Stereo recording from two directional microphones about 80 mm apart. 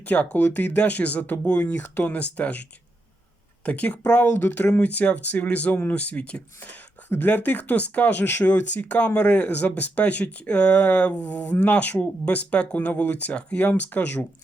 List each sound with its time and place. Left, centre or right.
0.0 s speech: centre